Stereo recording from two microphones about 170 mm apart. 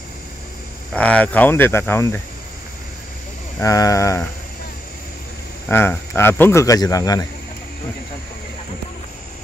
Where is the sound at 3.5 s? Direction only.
20° left (ahead or behind).